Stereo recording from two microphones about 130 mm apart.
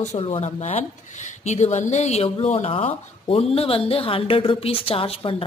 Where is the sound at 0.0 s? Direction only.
60° left (ahead or behind).